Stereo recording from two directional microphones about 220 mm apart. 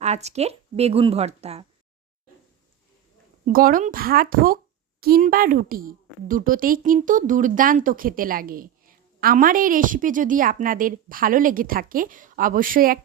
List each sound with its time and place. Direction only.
0.0 s speech: 30° right (ahead or behind)
3.4 s a woman's voice: 40° right (ahead or behind)